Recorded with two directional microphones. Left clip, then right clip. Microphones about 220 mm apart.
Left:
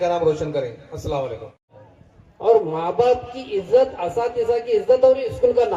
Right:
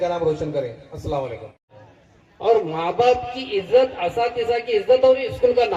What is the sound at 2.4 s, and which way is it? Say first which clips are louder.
Speech: left 2 dB; 55° left (ahead or behind).